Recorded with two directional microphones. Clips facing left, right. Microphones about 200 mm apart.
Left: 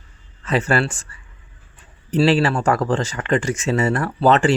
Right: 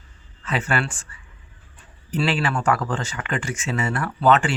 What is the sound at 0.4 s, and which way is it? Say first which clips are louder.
Speech: left 5 dB; 40° left (ahead or behind).